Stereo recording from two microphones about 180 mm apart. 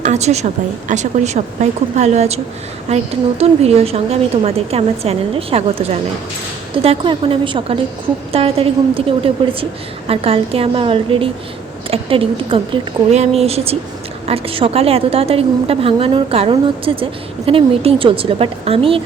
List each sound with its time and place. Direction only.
0.0 s a woman's voice: 40° right (ahead or behind)